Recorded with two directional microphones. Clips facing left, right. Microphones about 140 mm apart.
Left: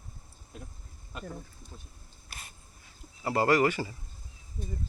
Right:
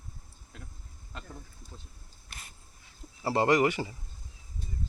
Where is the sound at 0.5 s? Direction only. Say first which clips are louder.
Left 4 dB; 20° left (ahead or behind).